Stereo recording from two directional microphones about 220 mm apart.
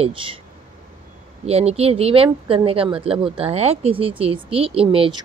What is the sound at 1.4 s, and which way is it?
A woman's voice, 25° right (ahead or behind).